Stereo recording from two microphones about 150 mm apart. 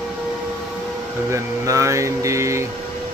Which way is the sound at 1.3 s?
20° right (ahead or behind).